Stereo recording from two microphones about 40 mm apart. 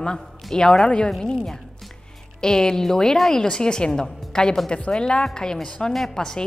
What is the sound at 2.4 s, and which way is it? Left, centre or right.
A woman's voice, centre.